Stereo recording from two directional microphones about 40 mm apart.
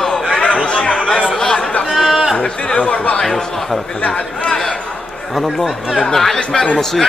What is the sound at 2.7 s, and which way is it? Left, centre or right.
Speech, left.